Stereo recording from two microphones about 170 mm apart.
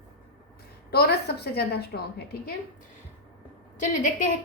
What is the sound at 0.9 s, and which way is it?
A woman's voice, 70° left (ahead or behind).